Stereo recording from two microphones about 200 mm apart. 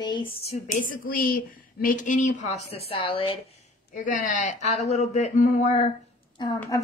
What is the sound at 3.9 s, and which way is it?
A woman's voice, 40° left (ahead or behind).